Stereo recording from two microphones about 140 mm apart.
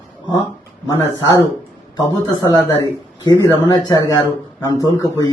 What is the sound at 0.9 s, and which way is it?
A man's voice, 25° left (ahead or behind).